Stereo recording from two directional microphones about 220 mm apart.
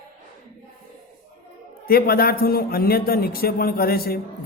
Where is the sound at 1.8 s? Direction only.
45° left (ahead or behind).